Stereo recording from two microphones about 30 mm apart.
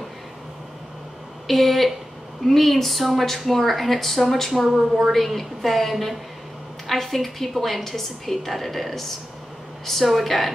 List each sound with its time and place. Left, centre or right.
1.5 s a woman's voice: centre